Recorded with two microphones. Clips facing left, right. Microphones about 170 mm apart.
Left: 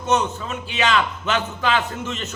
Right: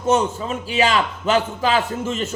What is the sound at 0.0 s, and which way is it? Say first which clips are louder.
A man's voice: right 3 dB; 30° right (ahead or behind).